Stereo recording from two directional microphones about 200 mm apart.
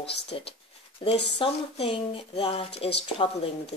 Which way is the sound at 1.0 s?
30° left (ahead or behind).